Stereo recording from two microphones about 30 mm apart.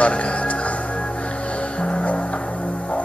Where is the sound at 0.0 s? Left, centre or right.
Left.